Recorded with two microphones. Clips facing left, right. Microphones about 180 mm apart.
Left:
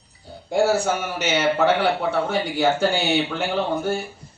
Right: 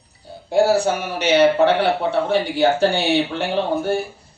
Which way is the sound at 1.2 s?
60° right (ahead or behind).